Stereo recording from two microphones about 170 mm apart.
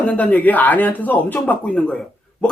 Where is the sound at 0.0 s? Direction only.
5° left (ahead or behind).